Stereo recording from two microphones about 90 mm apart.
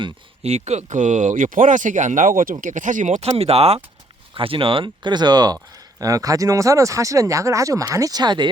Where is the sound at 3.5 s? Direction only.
90° right.